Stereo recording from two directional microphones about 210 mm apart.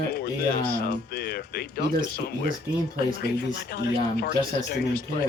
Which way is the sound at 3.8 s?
45° left (ahead or behind).